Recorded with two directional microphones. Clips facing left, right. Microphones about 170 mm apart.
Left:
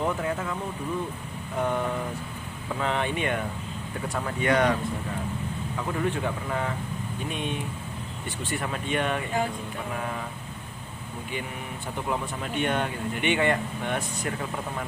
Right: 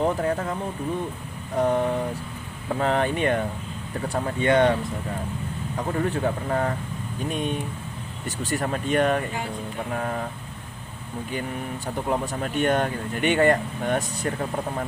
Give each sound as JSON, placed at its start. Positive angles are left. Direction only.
{"t": 0.2, "sound": "speech", "side_deg": -40}
{"t": 1.5, "sound": "speech", "side_deg": -35}
{"t": 5.7, "sound": "speech", "side_deg": -40}
{"t": 12.0, "sound": "speech", "side_deg": -40}